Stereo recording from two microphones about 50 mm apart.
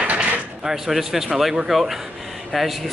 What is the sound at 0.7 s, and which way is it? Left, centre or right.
A man's voice, centre.